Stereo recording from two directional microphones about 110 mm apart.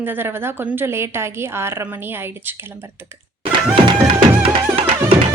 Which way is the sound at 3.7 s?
50° right (ahead or behind).